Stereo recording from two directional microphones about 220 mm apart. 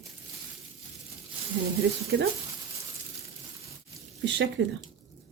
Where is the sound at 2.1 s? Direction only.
55° right (ahead or behind).